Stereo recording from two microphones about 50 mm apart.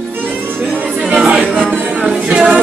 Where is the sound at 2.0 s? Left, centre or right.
Centre.